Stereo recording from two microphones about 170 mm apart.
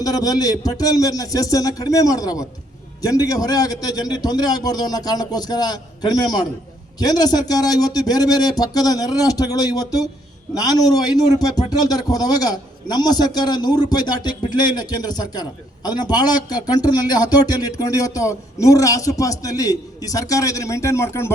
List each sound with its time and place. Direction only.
0.0 s a man's voice: 20° left (ahead or behind)